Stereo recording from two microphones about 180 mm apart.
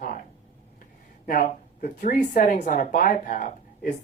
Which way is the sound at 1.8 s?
45° left (ahead or behind).